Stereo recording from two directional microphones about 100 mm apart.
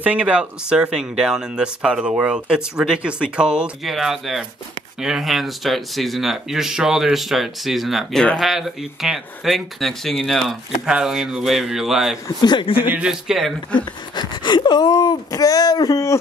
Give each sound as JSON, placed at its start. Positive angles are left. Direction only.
{"t": 0.0, "sound": "speech", "side_deg": -15}
{"t": 12.4, "sound": "a man's voice", "side_deg": 50}
{"t": 12.9, "sound": "speech", "side_deg": -5}
{"t": 14.1, "sound": "speech", "side_deg": 50}